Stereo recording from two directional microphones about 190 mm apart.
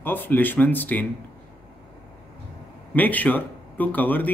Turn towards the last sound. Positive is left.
turn(degrees=10)  # may be behind; listen again after turning